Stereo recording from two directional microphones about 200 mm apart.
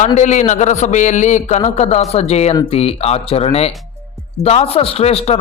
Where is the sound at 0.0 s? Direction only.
35° left (ahead or behind).